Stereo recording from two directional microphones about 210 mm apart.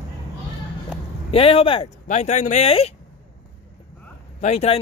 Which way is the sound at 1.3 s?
25° left (ahead or behind).